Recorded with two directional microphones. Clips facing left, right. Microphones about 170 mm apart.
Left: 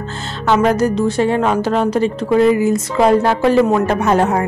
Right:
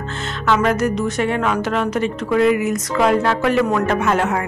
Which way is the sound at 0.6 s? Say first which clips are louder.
Left 6 dB; 35° left (ahead or behind).